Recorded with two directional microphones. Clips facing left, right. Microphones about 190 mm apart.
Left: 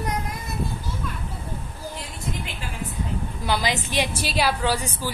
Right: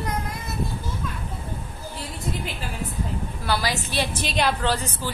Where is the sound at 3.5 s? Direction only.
20° left (ahead or behind).